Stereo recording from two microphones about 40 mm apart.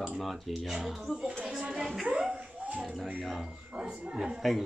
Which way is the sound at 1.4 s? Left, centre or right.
Centre.